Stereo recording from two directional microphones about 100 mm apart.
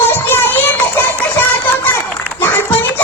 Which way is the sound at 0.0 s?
20° left (ahead or behind).